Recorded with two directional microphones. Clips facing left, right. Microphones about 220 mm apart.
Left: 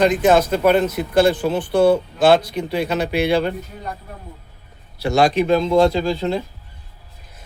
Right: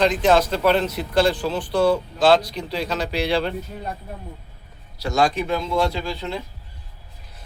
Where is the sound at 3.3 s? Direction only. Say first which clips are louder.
Left 2 dB; centre (ahead or behind).